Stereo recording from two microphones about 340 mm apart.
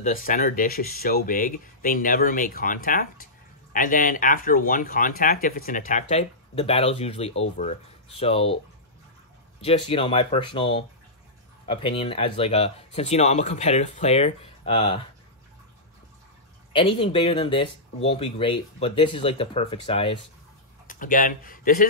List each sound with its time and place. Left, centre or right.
0.0 s speech: left
9.6 s speech: centre
16.7 s speech: centre